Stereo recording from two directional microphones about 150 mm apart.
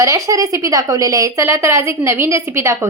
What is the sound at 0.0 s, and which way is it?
A woman's voice, 20° right (ahead or behind).